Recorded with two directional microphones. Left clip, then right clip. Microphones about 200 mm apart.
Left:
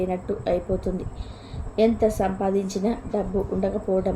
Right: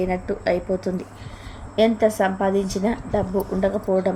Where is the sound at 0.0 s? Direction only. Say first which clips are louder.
Right 3 dB; 15° right (ahead or behind).